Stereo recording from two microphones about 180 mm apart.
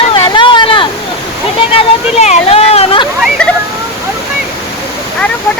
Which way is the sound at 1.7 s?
40° left (ahead or behind).